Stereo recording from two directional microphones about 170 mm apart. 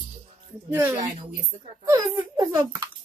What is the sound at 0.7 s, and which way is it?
Speech, 15° right (ahead or behind).